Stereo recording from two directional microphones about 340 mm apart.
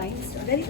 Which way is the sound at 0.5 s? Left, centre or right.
Left.